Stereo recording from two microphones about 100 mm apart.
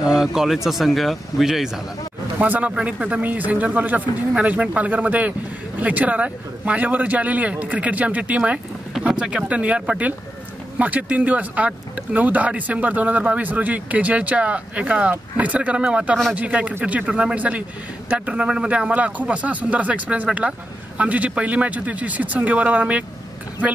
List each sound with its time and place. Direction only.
0.0 s a man's voice: 5° right (ahead or behind)
2.3 s speech: 15° right (ahead or behind)